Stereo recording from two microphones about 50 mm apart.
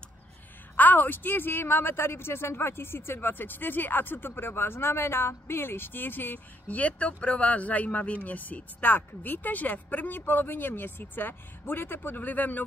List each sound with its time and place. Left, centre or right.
0.7 s speech: left